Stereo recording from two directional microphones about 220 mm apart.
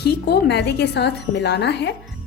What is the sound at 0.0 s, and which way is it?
Speech, 50° left (ahead or behind).